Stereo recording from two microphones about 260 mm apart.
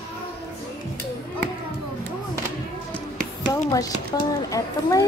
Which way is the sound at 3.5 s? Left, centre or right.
Centre.